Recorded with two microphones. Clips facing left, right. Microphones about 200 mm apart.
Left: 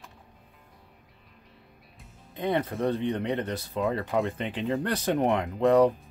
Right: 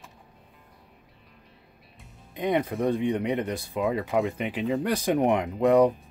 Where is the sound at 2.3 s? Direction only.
15° right (ahead or behind).